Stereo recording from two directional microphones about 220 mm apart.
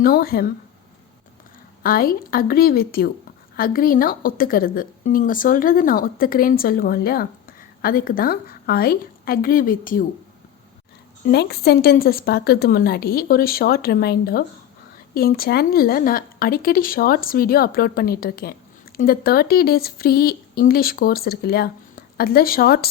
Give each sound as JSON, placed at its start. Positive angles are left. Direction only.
{"t": 0.0, "sound": "speech", "side_deg": 40}
{"t": 1.8, "sound": "a woman's voice", "side_deg": 40}
{"t": 11.3, "sound": "a woman's voice", "side_deg": 50}